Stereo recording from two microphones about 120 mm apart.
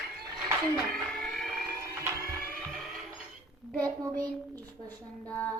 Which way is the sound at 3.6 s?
5° right (ahead or behind).